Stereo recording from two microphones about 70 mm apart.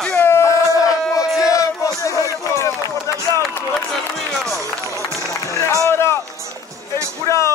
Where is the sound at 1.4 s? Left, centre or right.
Left.